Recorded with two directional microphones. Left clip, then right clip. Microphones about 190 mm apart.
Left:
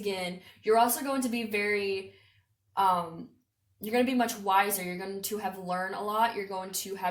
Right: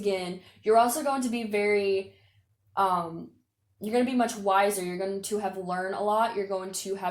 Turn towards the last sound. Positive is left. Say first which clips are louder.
# right 1 dB
turn(degrees=-40)  # may be behind; listen again after turning